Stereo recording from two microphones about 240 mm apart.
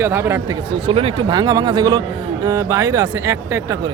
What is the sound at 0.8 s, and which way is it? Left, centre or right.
Speech, right.